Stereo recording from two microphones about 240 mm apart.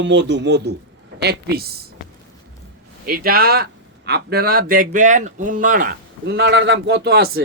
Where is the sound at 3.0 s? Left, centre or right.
Right.